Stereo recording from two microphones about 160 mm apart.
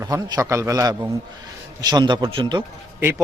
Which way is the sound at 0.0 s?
20° right (ahead or behind).